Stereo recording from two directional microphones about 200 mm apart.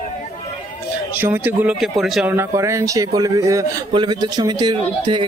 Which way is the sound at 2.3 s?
15° right (ahead or behind).